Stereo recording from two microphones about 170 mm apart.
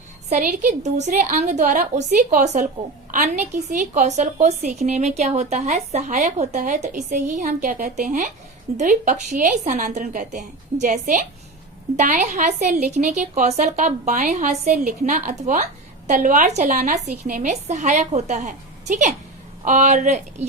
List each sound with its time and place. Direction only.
0.3 s a woman's voice: 45° right (ahead or behind)